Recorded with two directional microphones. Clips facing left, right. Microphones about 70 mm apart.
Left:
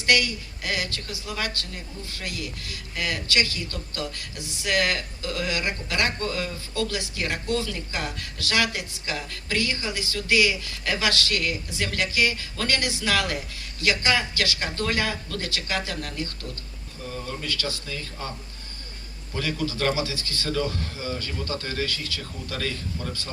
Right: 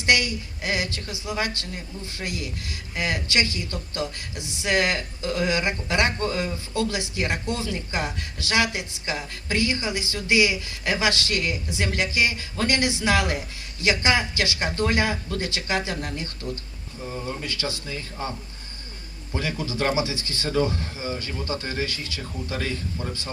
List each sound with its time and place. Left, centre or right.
0.0 s speech: right